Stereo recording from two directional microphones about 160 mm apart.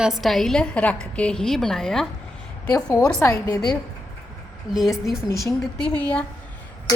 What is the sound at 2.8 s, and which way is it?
Speech, 20° left (ahead or behind).